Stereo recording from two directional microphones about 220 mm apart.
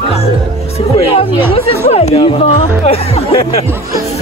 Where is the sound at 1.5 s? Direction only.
30° left (ahead or behind).